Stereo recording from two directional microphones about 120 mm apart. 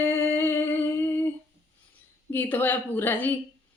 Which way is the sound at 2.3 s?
15° left (ahead or behind).